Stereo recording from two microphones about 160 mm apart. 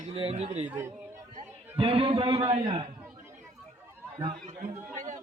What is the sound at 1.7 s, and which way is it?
A man's voice, 35° right (ahead or behind).